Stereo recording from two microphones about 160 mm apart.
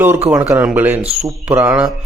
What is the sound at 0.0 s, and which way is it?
A man's voice, 10° right (ahead or behind).